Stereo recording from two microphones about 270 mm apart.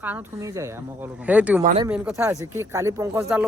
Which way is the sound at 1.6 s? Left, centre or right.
Right.